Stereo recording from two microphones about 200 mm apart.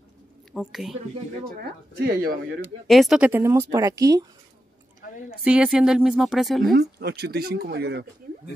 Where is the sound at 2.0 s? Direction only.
50° right (ahead or behind).